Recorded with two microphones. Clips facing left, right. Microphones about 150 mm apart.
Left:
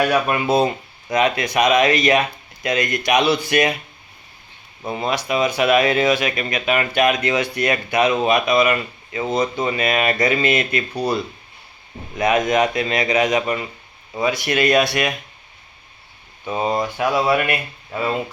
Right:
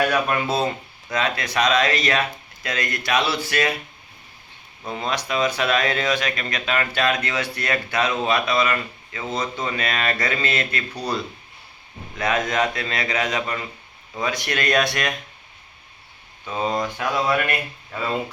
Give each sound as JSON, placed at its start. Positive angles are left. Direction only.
{"t": 0.0, "sound": "speech", "side_deg": 10}
{"t": 4.9, "sound": "speech", "side_deg": 10}
{"t": 16.5, "sound": "speech", "side_deg": 10}